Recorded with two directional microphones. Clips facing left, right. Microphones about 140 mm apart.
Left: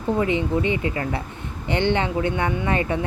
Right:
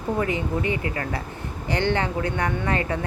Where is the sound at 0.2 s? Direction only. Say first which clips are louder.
Left 4 dB; 20° left (ahead or behind).